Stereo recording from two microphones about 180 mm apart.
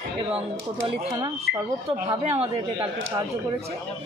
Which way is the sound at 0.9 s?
25° right (ahead or behind).